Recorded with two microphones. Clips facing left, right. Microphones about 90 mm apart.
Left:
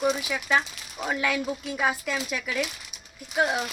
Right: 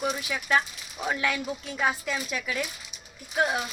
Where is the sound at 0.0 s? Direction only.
Centre (ahead or behind).